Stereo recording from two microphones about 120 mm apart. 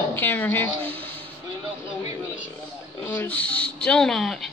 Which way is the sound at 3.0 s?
20° left (ahead or behind).